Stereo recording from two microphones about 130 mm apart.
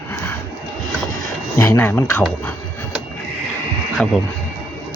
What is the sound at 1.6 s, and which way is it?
Speech, 15° left (ahead or behind).